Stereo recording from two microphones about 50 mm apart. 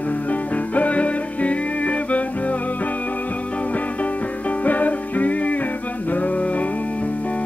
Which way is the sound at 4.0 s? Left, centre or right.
Left.